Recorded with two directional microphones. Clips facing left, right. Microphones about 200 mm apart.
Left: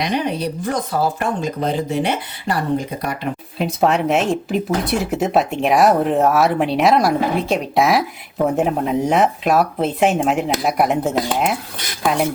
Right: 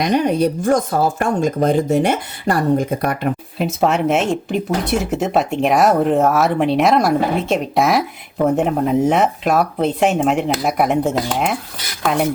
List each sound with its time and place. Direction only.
0.0 s speech: 45° right (ahead or behind)
3.6 s speech: centre (ahead or behind)